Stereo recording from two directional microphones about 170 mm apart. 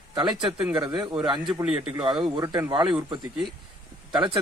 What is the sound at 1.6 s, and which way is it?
Speech, 5° right (ahead or behind).